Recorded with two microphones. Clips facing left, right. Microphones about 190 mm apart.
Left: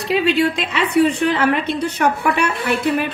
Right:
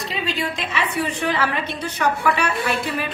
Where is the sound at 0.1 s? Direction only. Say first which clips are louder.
Left 12 dB; 65° left (ahead or behind).